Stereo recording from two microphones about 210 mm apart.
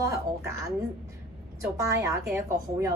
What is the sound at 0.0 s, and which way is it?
Speech, 15° right (ahead or behind).